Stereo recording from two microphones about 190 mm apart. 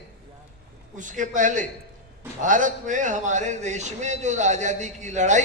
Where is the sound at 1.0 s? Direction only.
40° right (ahead or behind).